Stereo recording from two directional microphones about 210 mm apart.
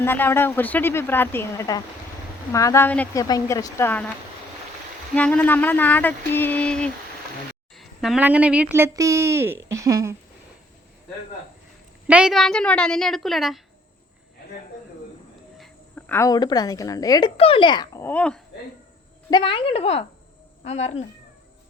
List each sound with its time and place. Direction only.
0.0 s speech: 10° left (ahead or behind)
5.1 s speech: 5° left (ahead or behind); by 10.2 s 15° right (ahead or behind)
12.0 s a woman's voice: 5° right (ahead or behind)
15.5 s speech: 5° left (ahead or behind)
19.3 s a woman's voice: 25° left (ahead or behind)